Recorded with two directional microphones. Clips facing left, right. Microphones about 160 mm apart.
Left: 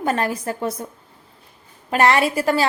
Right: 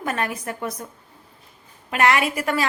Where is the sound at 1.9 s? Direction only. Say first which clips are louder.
Left 3 dB; 35° left (ahead or behind).